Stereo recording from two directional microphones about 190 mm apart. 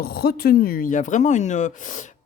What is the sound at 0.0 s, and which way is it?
Speech, 55° left (ahead or behind).